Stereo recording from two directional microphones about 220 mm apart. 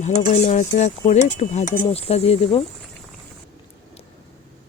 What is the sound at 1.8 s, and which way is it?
Speech, 25° left (ahead or behind).